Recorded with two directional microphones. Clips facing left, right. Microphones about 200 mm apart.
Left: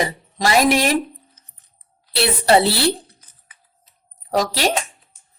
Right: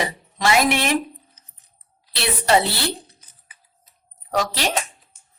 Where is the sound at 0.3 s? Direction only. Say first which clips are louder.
Left 3 dB; 35° left (ahead or behind).